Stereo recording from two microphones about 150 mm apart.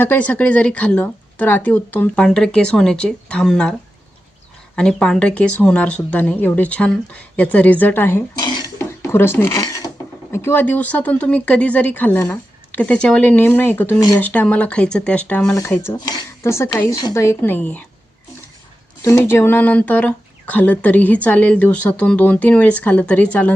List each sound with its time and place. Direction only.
0.0 s speech: 10° left (ahead or behind)
8.4 s cough: 30° left (ahead or behind)
8.8 s a sound: 15° left (ahead or behind)
10.3 s speech: 15° left (ahead or behind)
19.0 s speech: 20° left (ahead or behind)